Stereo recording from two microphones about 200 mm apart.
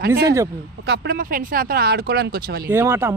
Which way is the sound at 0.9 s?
50° right (ahead or behind).